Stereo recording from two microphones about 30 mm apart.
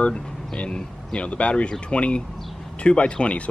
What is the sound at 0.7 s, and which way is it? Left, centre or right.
Speech, left.